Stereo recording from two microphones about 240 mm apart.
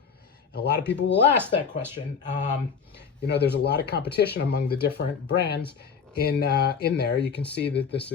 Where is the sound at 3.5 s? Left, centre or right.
Left.